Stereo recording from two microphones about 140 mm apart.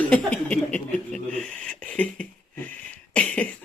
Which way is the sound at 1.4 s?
5° left (ahead or behind).